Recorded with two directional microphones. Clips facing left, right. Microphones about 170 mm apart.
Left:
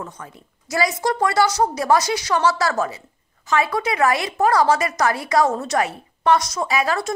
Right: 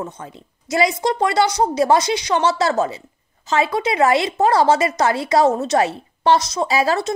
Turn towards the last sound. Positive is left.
turn(degrees=-30)  # may be behind; listen again after turning